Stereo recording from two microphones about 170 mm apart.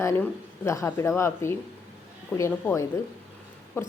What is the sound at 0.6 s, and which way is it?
Speech, 15° left (ahead or behind).